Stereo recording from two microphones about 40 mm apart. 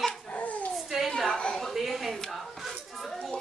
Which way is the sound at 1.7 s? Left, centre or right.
Centre.